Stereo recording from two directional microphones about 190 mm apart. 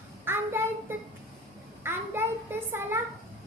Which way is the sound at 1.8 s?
10° right (ahead or behind).